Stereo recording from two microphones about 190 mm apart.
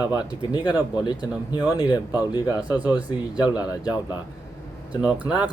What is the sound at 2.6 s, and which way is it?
Speech, 5° right (ahead or behind).